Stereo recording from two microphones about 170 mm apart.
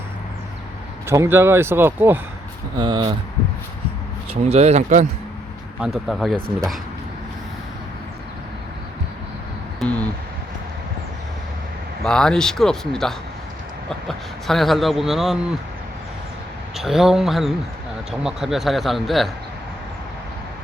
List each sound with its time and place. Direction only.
1.0 s speech: 15° right (ahead or behind)
2.7 s speech: 25° right (ahead or behind)
4.4 s speech: 40° right (ahead or behind)
5.8 s speech: centre (ahead or behind)
9.8 s a sound: 10° left (ahead or behind)
12.0 s speech: 5° left (ahead or behind)
16.7 s speech: centre (ahead or behind)